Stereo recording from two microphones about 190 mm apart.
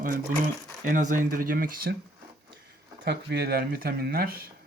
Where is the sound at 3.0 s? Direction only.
60° right (ahead or behind).